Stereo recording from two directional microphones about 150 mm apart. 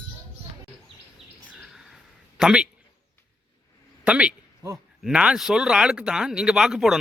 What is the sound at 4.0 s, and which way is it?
Speech, 10° right (ahead or behind).